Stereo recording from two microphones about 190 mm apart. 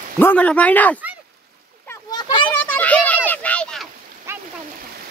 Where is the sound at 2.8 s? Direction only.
10° left (ahead or behind).